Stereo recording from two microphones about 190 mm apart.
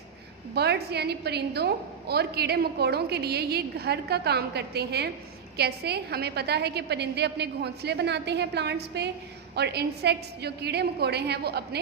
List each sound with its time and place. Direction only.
0.5 s a woman's voice: 60° right (ahead or behind)